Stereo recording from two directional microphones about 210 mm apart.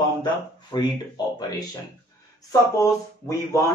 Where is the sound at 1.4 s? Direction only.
20° left (ahead or behind).